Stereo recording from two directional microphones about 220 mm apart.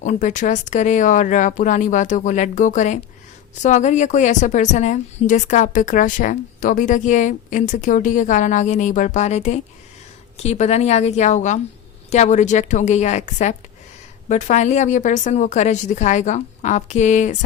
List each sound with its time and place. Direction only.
0.0 s a woman's voice: 35° left (ahead or behind)